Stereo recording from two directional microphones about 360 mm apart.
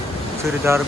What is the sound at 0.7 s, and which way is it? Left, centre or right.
Speech, centre.